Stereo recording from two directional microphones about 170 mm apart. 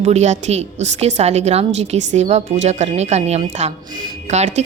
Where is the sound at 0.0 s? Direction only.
40° right (ahead or behind).